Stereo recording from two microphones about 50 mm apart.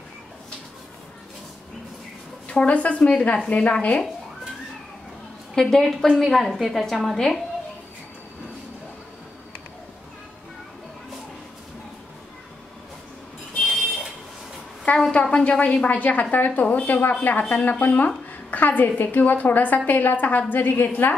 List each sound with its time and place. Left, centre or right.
2.4 s a woman's voice: left
5.5 s a woman's voice: centre
14.9 s a woman's voice: left